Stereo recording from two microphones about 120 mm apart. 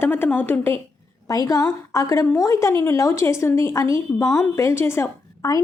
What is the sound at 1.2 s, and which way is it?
A woman's voice, 30° left (ahead or behind).